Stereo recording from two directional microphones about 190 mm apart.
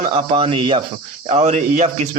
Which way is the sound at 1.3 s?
40° right (ahead or behind).